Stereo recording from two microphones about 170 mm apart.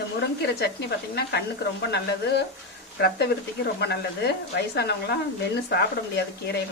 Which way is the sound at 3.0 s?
75° left (ahead or behind).